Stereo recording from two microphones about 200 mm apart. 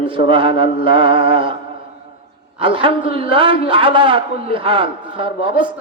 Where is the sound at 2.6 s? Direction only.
25° right (ahead or behind).